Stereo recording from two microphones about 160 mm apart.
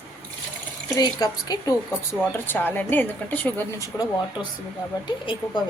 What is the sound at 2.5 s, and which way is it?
A woman's voice, 10° left (ahead or behind).